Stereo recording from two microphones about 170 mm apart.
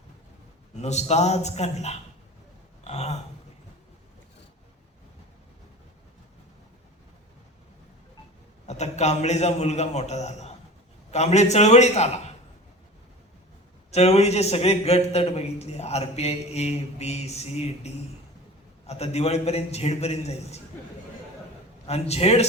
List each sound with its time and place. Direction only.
0.8 s a man's voice: 40° left (ahead or behind)
2.8 s a sound: 40° left (ahead or behind)
8.6 s a man's voice: 40° left (ahead or behind)
13.9 s a man's voice: 40° left (ahead or behind)
21.8 s a man's voice: 40° left (ahead or behind)